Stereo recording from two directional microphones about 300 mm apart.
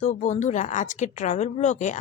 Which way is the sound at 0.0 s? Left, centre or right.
Left.